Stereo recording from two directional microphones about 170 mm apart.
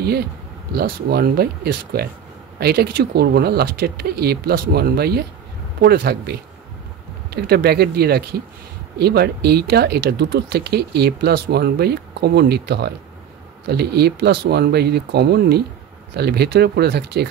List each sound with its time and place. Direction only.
0.7 s speech: 65° right (ahead or behind)